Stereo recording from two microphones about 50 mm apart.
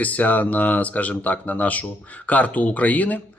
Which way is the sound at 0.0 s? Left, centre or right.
Left.